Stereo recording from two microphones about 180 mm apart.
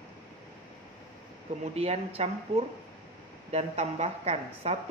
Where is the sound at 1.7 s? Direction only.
35° right (ahead or behind).